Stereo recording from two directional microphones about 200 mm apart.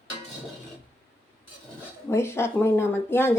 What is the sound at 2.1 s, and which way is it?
Speech, 10° left (ahead or behind).